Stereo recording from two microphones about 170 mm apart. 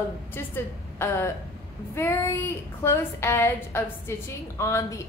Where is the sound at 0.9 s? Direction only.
15° left (ahead or behind).